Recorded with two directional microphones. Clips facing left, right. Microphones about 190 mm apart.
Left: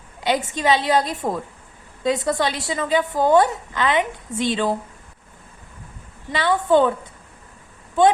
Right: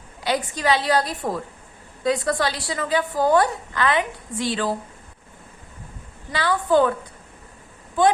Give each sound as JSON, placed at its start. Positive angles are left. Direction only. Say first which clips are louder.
{"t": 0.2, "sound": "a woman's voice", "louder": "left 2 dB", "side_deg": 20}
{"t": 6.3, "sound": "a woman's voice", "louder": "left 2 dB", "side_deg": 20}